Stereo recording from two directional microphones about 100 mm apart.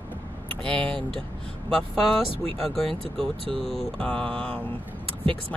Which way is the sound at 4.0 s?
10° left (ahead or behind).